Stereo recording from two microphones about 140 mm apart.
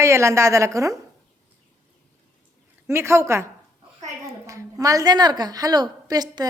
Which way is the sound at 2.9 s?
20° right (ahead or behind).